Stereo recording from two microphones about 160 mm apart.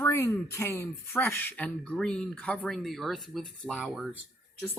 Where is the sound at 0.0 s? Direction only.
15° left (ahead or behind).